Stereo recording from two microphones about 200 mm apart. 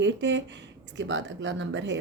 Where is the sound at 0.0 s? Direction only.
65° right (ahead or behind).